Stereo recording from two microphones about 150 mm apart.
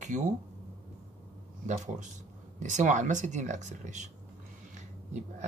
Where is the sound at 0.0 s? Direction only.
55° right (ahead or behind).